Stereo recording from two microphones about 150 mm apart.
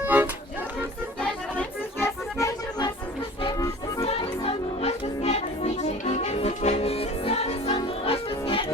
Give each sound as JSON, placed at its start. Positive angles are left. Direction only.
{"t": 0.0, "sound": "music", "side_deg": -10}
{"t": 1.2, "sound": "music", "side_deg": 10}
{"t": 2.4, "sound": "accordion", "side_deg": 25}
{"t": 4.0, "sound": "music", "side_deg": 40}